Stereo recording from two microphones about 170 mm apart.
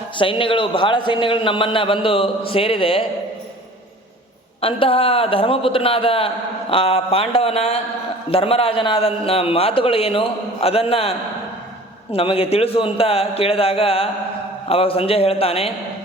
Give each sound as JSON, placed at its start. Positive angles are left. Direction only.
{"t": 0.2, "sound": "a man's voice", "side_deg": 30}
{"t": 4.6, "sound": "a man's voice", "side_deg": 35}
{"t": 12.1, "sound": "a man's voice", "side_deg": 35}